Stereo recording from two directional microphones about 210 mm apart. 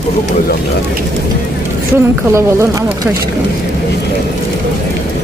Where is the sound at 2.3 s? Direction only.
15° right (ahead or behind).